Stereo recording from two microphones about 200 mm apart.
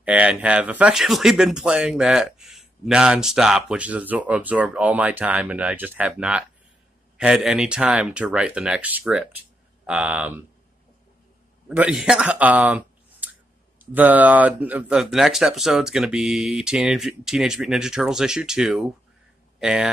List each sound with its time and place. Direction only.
0.0 s speech: 5° right (ahead or behind)
11.7 s speech: 5° right (ahead or behind)